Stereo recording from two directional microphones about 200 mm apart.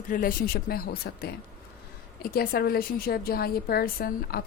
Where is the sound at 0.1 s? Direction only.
45° left (ahead or behind).